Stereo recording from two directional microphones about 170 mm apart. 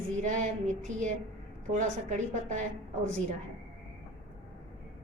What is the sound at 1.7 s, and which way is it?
Speech, 45° right (ahead or behind).